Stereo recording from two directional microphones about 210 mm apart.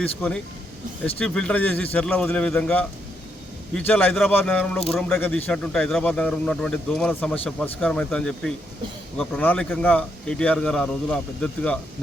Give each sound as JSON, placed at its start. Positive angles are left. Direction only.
{"t": 0.0, "sound": "speech", "side_deg": 5}